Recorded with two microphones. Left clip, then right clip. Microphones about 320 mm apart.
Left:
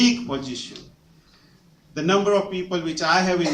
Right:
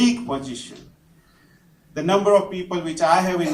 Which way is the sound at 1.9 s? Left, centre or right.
Centre.